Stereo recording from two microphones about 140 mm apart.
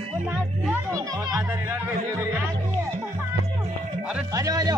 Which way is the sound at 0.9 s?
25° right (ahead or behind).